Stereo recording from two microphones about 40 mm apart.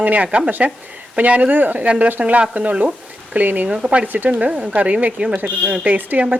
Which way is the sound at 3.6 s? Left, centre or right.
Right.